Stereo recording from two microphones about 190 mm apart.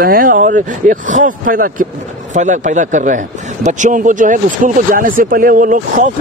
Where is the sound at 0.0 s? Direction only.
50° right (ahead or behind).